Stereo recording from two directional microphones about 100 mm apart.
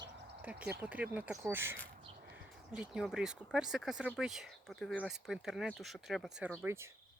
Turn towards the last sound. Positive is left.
turn(degrees=-25)  # may be behind; listen again after turning